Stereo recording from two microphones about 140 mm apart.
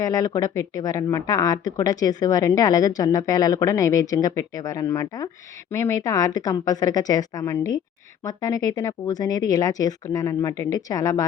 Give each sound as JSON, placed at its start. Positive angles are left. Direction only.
{"t": 0.0, "sound": "speech", "side_deg": 25}